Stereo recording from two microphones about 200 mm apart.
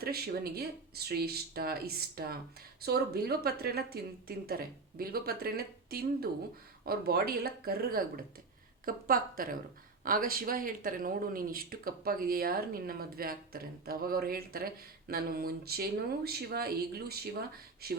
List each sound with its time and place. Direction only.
0.0 s speech: 50° right (ahead or behind)